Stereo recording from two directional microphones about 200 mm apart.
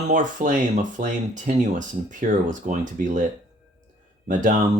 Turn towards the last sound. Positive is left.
turn(degrees=-40)  # may be behind; listen again after turning